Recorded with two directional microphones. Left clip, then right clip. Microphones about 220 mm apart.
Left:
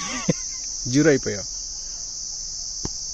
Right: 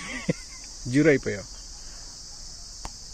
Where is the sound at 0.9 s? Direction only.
15° left (ahead or behind).